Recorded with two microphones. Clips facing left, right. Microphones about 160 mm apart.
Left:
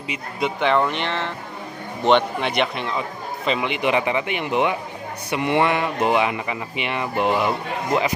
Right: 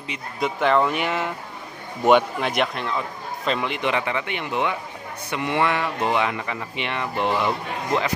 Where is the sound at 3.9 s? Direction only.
15° left (ahead or behind).